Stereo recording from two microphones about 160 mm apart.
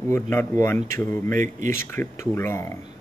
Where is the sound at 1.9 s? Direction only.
15° left (ahead or behind).